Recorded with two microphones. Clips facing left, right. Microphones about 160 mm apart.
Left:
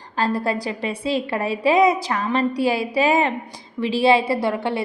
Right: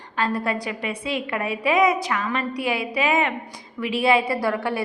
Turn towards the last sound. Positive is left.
turn(degrees=25)  # may be behind; listen again after turning